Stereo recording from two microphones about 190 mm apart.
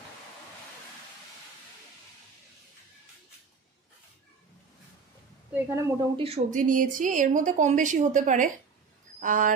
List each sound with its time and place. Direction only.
5.5 s a woman's voice: 15° right (ahead or behind)
6.1 s speech: 30° right (ahead or behind)